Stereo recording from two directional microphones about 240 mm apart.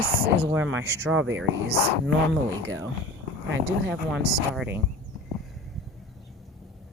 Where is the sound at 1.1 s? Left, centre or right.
Right.